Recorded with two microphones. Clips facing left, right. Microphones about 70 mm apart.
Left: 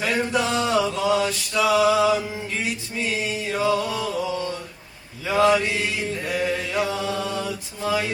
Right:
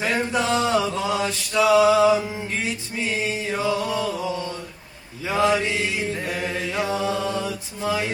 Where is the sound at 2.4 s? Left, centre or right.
Right.